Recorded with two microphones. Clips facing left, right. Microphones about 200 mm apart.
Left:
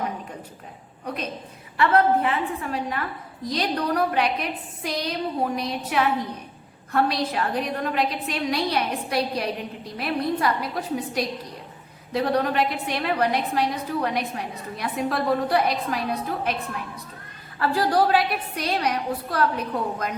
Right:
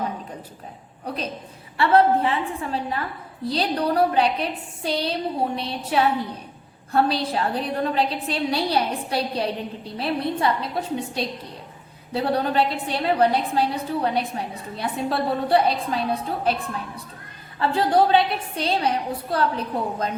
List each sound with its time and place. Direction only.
1.0 s a woman's voice: 30° right (ahead or behind)